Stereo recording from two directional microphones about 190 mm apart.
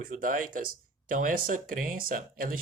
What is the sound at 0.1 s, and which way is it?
Speech, 45° right (ahead or behind).